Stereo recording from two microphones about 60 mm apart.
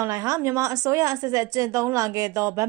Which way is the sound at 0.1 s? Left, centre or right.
Right.